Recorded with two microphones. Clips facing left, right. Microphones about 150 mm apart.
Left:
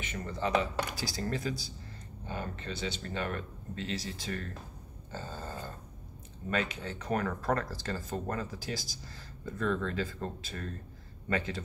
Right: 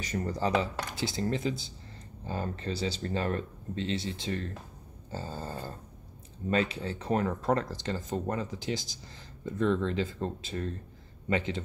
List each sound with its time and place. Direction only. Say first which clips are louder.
0.0 s speech: right 4 dB; 40° right (ahead or behind)
0.9 s speech: right 4 dB; 25° right (ahead or behind)
2.2 s speech: right 4 dB; 35° right (ahead or behind)